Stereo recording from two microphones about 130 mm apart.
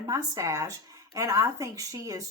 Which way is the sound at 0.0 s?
25° right (ahead or behind).